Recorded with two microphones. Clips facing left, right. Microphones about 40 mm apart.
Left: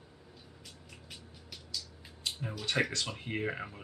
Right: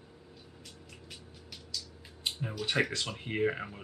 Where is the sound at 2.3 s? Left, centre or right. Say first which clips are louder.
Right 2 dB; centre.